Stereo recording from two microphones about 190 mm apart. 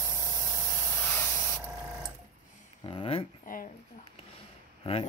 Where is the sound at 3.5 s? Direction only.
45° left (ahead or behind).